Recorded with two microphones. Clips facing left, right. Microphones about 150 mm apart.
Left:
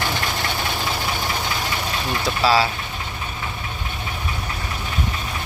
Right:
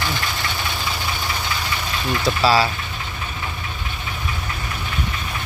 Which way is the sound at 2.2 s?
Centre (ahead or behind).